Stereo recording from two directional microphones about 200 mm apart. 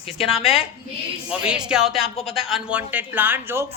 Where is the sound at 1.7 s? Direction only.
Centre (ahead or behind).